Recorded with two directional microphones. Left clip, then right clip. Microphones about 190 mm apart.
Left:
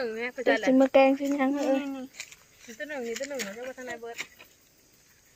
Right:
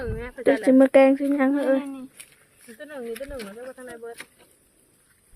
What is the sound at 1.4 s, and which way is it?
Speech, 45° right (ahead or behind).